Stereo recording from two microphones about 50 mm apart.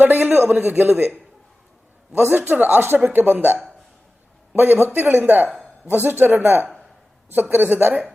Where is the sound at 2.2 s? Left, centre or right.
Right.